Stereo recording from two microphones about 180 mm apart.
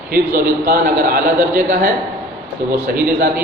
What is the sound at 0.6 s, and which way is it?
A man's voice, 55° right (ahead or behind).